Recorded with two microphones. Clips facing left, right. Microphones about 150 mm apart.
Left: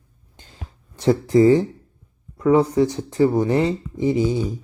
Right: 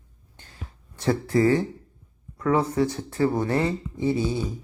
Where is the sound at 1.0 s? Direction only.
20° left (ahead or behind).